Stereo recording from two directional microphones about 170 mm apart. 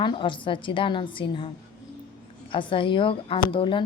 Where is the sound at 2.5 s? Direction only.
30° left (ahead or behind).